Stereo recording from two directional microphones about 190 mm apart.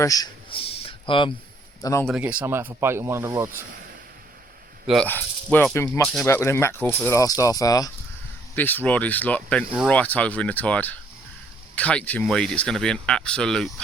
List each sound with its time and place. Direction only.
0.0 s a sound: 20° left (ahead or behind)
1.8 s speech: 15° left (ahead or behind)
2.0 s speech: 5° right (ahead or behind)
4.9 s speech: 5° left (ahead or behind)